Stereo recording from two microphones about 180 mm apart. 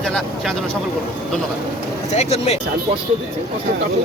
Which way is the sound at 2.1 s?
35° left (ahead or behind).